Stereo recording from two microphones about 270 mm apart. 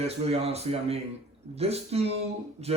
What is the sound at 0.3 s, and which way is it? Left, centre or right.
Speech, right.